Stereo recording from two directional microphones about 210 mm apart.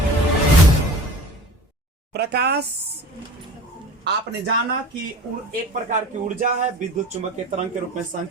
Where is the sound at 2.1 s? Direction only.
50° right (ahead or behind).